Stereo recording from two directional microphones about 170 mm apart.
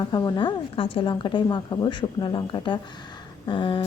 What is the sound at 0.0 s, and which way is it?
A woman's voice, 25° left (ahead or behind).